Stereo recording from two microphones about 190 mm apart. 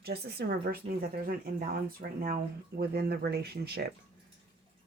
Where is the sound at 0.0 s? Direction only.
55° right (ahead or behind).